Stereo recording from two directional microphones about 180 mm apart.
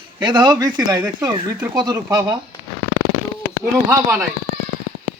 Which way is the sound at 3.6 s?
15° right (ahead or behind).